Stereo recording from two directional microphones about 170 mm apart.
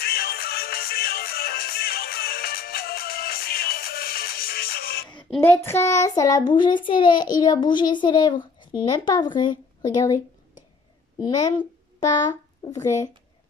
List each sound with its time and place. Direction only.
0.0 s music: 65° left (ahead or behind)
5.4 s a child's voice: 15° left (ahead or behind)
11.1 s speech: 25° left (ahead or behind)